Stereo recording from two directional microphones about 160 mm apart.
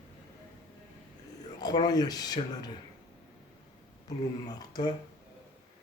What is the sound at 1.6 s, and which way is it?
Speech, 25° left (ahead or behind).